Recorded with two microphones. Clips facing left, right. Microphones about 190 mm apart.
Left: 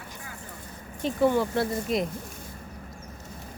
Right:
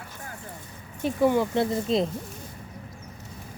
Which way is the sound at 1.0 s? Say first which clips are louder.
Right 1 dB; 15° right (ahead or behind).